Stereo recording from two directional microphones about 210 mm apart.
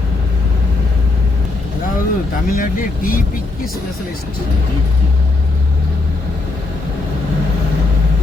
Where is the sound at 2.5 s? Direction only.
40° left (ahead or behind).